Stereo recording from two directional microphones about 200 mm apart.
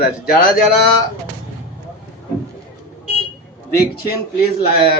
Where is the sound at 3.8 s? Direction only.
50° left (ahead or behind).